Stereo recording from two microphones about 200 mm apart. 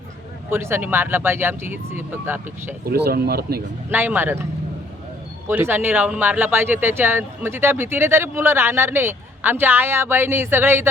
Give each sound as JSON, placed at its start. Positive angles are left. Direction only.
{"t": 0.5, "sound": "speech", "side_deg": -10}
{"t": 2.9, "sound": "speech", "side_deg": -50}
{"t": 3.8, "sound": "speech", "side_deg": -10}
{"t": 5.5, "sound": "speech", "side_deg": -10}